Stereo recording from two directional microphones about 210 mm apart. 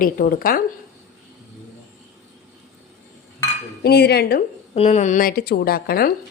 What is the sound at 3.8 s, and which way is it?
Speech, 50° left (ahead or behind).